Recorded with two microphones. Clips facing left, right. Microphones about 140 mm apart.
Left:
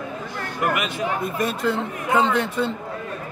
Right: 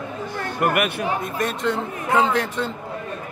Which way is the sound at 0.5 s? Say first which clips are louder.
Right 3 dB; 60° right (ahead or behind).